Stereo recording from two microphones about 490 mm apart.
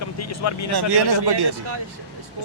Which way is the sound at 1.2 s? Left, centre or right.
Right.